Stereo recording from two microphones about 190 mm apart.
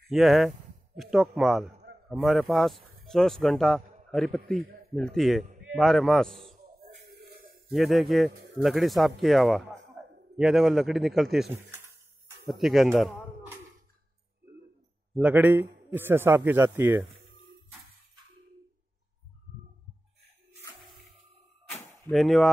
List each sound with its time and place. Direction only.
0.1 s speech: centre (ahead or behind)
6.7 s music: 50° right (ahead or behind)
7.2 s a sound: 50° right (ahead or behind)
7.7 s speech: centre (ahead or behind)
15.1 s speech: 10° right (ahead or behind)
22.1 s speech: centre (ahead or behind)